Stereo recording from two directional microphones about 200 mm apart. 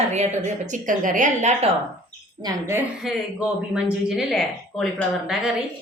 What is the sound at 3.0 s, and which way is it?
A woman's voice, centre (ahead or behind).